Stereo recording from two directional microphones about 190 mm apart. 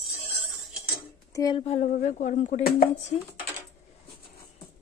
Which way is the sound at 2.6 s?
50° left (ahead or behind).